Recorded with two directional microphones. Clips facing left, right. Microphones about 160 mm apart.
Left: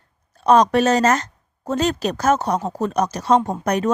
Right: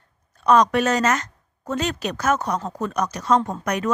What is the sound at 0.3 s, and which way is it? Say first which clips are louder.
A woman's voice: left 2 dB; 35° left (ahead or behind).